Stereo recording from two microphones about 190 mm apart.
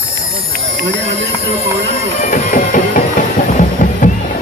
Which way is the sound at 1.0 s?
35° right (ahead or behind).